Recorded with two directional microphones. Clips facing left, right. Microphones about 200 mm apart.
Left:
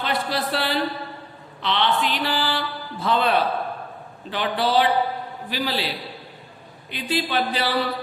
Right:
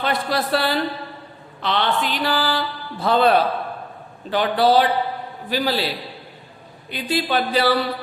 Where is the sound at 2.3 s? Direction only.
40° right (ahead or behind).